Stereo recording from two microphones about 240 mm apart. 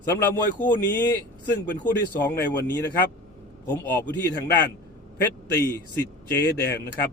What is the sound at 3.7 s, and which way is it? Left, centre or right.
A man's voice, centre.